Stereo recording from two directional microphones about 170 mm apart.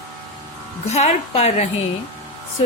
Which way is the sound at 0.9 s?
40° left (ahead or behind).